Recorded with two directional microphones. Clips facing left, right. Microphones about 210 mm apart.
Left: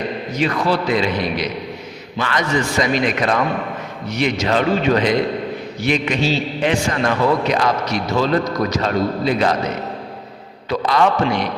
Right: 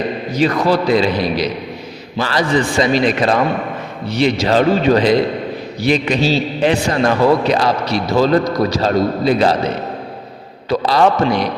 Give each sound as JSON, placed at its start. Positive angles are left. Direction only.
{"t": 0.3, "sound": "a man's voice", "side_deg": -35}